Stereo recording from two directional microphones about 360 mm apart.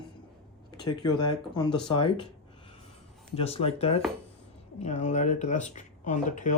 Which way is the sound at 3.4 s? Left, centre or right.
Centre.